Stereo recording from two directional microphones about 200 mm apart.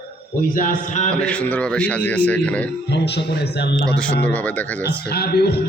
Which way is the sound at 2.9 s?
60° left (ahead or behind).